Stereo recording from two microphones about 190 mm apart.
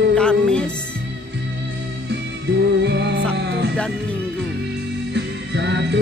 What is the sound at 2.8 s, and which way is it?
Music, 60° right (ahead or behind).